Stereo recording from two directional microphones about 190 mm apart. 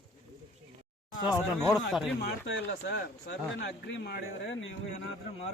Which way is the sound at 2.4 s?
70° left (ahead or behind).